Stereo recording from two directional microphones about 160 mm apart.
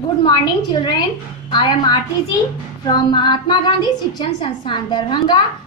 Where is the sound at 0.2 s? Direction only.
30° left (ahead or behind).